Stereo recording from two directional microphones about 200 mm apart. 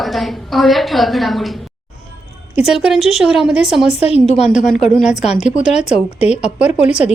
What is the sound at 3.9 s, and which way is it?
Speech, 30° left (ahead or behind).